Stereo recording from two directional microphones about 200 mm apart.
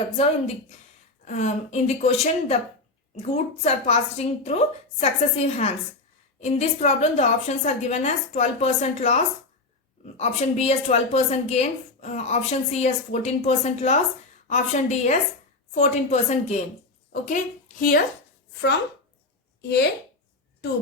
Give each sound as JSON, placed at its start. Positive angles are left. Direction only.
{"t": 1.2, "sound": "a woman's voice", "side_deg": 35}
{"t": 19.6, "sound": "a woman's voice", "side_deg": 55}